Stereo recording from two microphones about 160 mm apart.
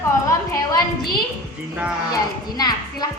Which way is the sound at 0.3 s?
20° left (ahead or behind).